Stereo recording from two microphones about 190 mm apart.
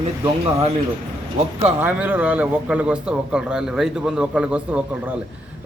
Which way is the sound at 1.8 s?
10° right (ahead or behind).